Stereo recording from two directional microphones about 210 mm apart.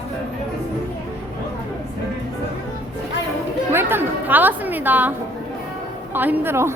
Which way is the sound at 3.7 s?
10° right (ahead or behind).